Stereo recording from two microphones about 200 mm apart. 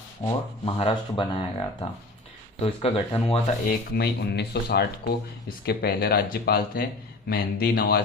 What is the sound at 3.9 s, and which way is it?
Speech, 55° left (ahead or behind).